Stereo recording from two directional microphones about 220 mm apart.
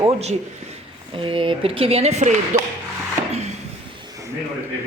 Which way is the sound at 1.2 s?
25° right (ahead or behind).